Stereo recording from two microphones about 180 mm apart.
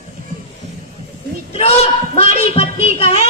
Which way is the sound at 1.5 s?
35° left (ahead or behind).